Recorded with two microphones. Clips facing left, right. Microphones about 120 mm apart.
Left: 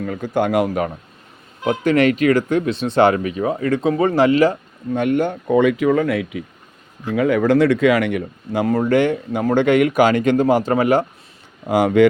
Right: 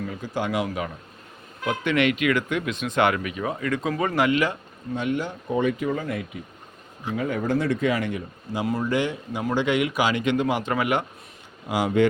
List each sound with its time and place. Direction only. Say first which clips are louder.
0.0 s speech: left 8 dB; 55° left (ahead or behind)
1.8 s speech: left 7 dB; 40° left (ahead or behind)
4.9 s speech: left 8 dB; 55° left (ahead or behind); by 8.6 s 75° left (ahead or behind)
8.6 s speech: left 8 dB; 55° left (ahead or behind); by 11.0 s 35° left (ahead or behind)
11.7 s speech: left 8 dB; 55° left (ahead or behind)